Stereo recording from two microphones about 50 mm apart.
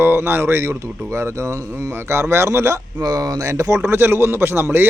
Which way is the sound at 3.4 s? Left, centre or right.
Right.